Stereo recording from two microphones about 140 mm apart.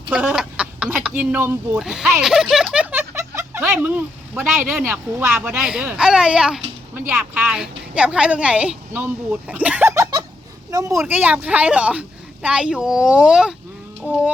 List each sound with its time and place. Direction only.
0.1 s a sound: 10° right (ahead or behind)
1.0 s a woman's voice: 10° right (ahead or behind)
1.8 s speech: centre (ahead or behind)
2.2 s a sound: 5° right (ahead or behind)
3.7 s a woman's voice: 10° right (ahead or behind)
4.8 s a woman's voice: 15° right (ahead or behind)
6.9 s a woman's voice: 15° right (ahead or behind)
11.0 s a woman's voice: 10° right (ahead or behind)